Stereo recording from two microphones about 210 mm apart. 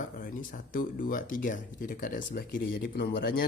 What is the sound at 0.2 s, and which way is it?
Speech, 40° left (ahead or behind).